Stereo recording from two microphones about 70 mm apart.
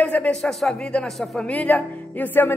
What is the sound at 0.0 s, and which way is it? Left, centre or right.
Speech, centre.